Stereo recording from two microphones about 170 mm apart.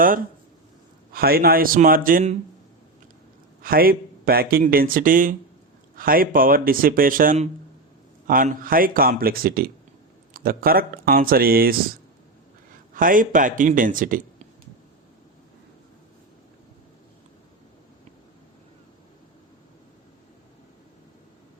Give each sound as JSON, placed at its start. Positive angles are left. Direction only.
{"t": 1.1, "sound": "a man's voice", "side_deg": -60}
{"t": 3.6, "sound": "a man's voice", "side_deg": -60}
{"t": 12.9, "sound": "speech", "side_deg": -55}